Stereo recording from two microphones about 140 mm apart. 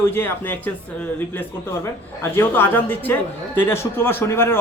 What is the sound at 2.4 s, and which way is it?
Speech, 15° left (ahead or behind).